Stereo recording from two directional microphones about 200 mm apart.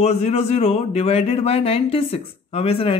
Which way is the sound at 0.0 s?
30° left (ahead or behind).